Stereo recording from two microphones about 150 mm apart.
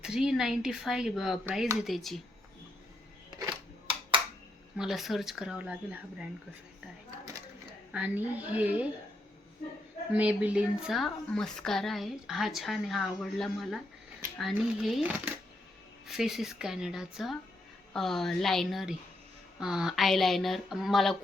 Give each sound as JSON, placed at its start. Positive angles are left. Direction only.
{"t": 0.0, "sound": "a woman's voice", "side_deg": -5}
{"t": 3.2, "sound": "camera", "side_deg": -25}
{"t": 4.8, "sound": "a woman's voice", "side_deg": 0}
{"t": 7.9, "sound": "a woman's voice", "side_deg": -10}
{"t": 10.2, "sound": "a woman's voice", "side_deg": -10}